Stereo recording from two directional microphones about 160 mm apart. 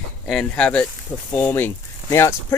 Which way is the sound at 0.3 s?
5° left (ahead or behind).